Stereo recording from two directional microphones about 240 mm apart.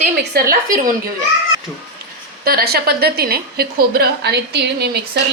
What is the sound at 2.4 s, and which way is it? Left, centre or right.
A woman's voice, right.